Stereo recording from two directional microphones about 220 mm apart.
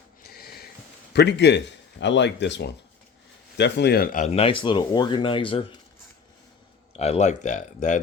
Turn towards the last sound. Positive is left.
turn(degrees=35)  # may be behind; listen again after turning